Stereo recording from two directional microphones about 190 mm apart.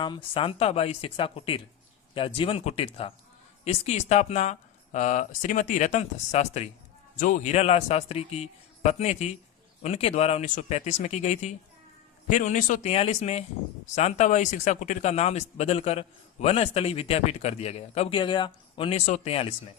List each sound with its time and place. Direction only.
0.0 s speech: 25° left (ahead or behind)